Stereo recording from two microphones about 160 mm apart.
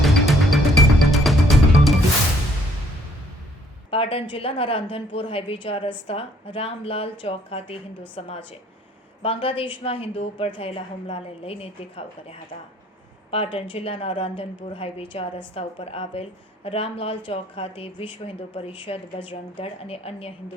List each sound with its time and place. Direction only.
0.0 s music: centre (ahead or behind)
3.8 s a woman's voice: 35° left (ahead or behind)